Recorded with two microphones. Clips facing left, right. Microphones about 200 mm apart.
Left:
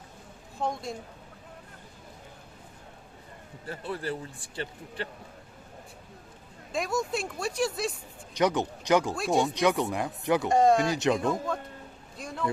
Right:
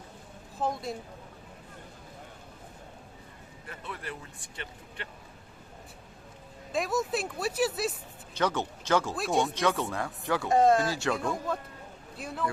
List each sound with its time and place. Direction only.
0.6 s speech: centre (ahead or behind)
3.7 s speech: 30° left (ahead or behind)
6.7 s speech: centre (ahead or behind)
8.4 s speech: 15° left (ahead or behind)
9.1 s speech: centre (ahead or behind)
9.6 s speech: 15° left (ahead or behind)
10.5 s speech: centre (ahead or behind)
10.8 s speech: 20° left (ahead or behind)
12.1 s a man's voice: 5° right (ahead or behind)